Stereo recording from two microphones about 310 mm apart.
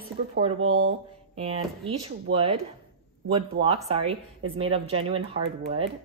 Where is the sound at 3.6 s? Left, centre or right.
Centre.